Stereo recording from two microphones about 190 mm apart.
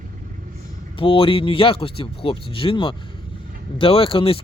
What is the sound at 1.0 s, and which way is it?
Speech, 25° left (ahead or behind).